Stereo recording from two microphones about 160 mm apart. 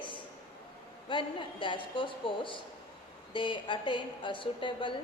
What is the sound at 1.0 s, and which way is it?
A woman's voice, 30° left (ahead or behind).